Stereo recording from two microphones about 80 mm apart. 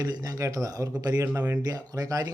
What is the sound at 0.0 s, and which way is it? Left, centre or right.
Speech, right.